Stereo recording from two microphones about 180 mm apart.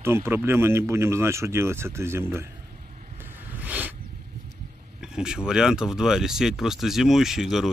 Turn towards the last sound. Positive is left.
turn(degrees=0)  # may be behind; listen again after turning